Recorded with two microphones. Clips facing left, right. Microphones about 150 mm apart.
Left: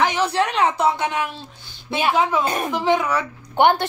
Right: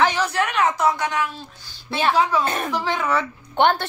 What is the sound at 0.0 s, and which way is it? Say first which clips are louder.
A woman's voice: left 1 dB; 25° left (ahead or behind).